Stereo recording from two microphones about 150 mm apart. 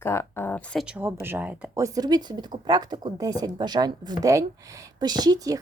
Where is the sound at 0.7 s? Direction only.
5° right (ahead or behind).